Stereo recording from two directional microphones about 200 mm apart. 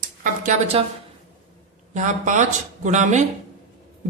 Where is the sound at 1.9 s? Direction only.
35° right (ahead or behind).